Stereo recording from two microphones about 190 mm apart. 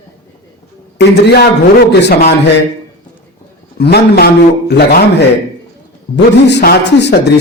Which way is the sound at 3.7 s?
60° left (ahead or behind).